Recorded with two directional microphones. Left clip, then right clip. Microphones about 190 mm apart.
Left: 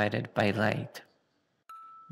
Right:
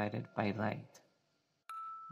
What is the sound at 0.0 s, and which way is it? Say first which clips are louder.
Speech: left 10 dB; 40° left (ahead or behind).